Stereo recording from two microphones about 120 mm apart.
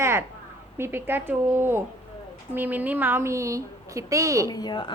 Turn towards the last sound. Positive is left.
turn(degrees=40)  # may be behind; listen again after turning